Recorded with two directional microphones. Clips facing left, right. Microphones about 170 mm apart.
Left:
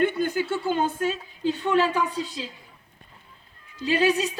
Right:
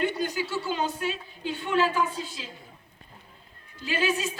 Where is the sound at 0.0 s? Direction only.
55° left (ahead or behind).